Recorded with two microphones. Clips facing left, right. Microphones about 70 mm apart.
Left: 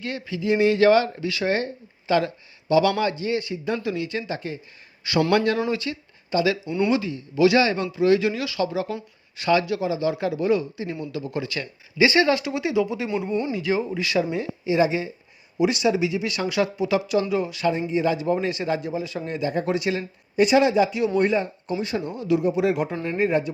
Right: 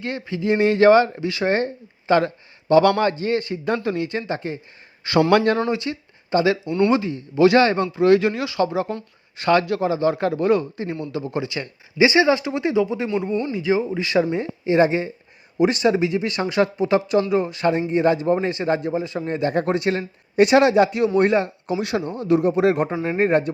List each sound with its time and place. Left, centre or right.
0.0 s speech: right
6.7 s speech: centre
6.9 s speech: right
8.4 s speech: right
9.4 s speech: right
11.1 s speech: right
13.1 s a man's voice: centre
13.5 s speech: right
17.7 s speech: right
19.4 s speech: right
22.0 s speech: right